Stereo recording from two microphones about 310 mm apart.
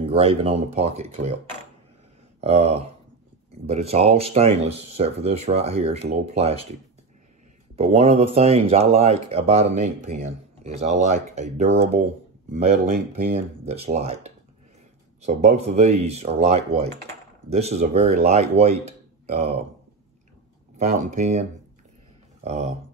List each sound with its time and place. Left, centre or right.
0.0 s speech: centre
2.4 s speech: centre
7.7 s speech: centre
20.7 s speech: right